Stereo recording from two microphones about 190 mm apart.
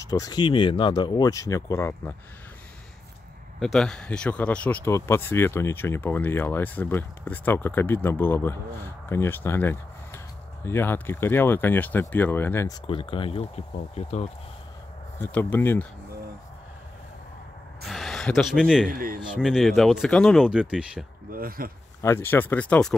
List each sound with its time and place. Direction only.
0.0 s speech: 20° left (ahead or behind)
3.5 s speech: centre (ahead or behind)
12.8 s speech: 25° left (ahead or behind)
15.1 s speech: 10° left (ahead or behind)
17.8 s speech: centre (ahead or behind)
18.9 s speech: 45° right (ahead or behind)
19.3 s speech: centre (ahead or behind)
21.3 s speech: 50° right (ahead or behind)
22.0 s speech: 10° left (ahead or behind)